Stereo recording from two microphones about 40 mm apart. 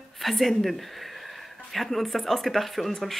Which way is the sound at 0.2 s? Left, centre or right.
Centre.